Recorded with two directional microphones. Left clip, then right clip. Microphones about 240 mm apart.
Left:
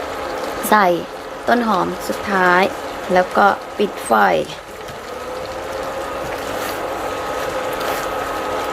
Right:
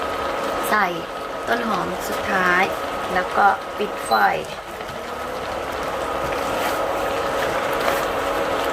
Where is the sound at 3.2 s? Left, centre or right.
Left.